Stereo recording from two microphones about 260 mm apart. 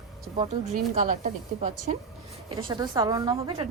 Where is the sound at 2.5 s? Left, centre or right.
Centre.